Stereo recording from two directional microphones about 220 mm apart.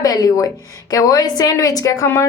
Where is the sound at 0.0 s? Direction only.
15° left (ahead or behind).